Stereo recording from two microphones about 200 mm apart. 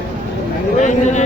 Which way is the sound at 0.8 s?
35° left (ahead or behind).